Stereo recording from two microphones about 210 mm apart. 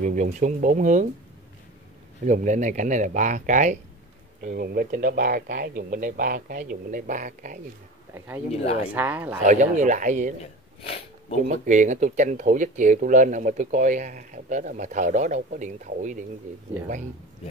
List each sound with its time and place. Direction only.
0.0 s speech: 40° right (ahead or behind)
2.2 s speech: 35° right (ahead or behind)
8.8 s speech: 5° right (ahead or behind)
9.5 s speech: 35° right (ahead or behind)
10.4 s a sound: 30° left (ahead or behind)
11.4 s speech: 35° right (ahead or behind)